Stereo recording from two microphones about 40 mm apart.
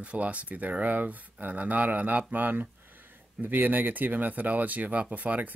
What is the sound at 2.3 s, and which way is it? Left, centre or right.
Speech, right.